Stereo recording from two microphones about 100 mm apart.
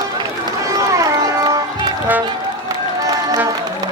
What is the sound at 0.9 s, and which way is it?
Run, 35° right (ahead or behind).